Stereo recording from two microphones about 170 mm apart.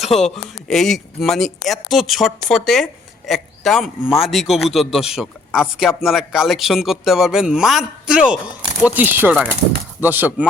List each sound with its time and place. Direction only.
0.0 s a woman's voice: centre (ahead or behind)